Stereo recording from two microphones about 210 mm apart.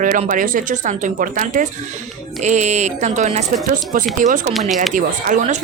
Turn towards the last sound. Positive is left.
turn(degrees=-35)  # may be behind; listen again after turning